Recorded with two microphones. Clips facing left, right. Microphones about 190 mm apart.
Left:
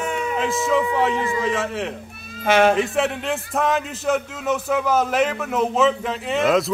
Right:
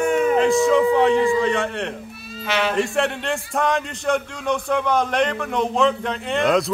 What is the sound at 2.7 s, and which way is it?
Speech, centre (ahead or behind).